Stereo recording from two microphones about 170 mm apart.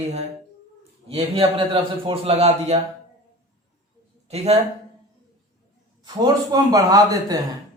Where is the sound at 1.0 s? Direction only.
35° right (ahead or behind).